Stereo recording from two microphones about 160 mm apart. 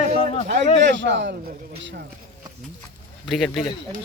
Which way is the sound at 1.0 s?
90° right.